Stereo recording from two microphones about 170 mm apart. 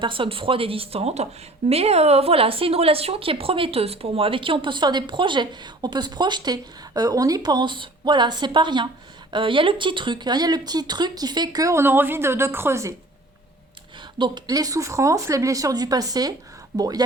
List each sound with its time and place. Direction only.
0.0 s speech: 30° right (ahead or behind); by 12.9 s 15° right (ahead or behind)
14.2 s speech: 25° right (ahead or behind)